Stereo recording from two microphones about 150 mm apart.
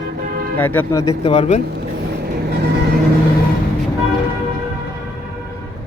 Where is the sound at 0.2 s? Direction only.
70° right (ahead or behind).